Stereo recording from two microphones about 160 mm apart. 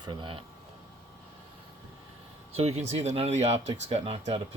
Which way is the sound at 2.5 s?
40° right (ahead or behind).